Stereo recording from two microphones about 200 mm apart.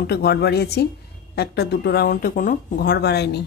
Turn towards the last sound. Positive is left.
turn(degrees=55)  # may be behind; listen again after turning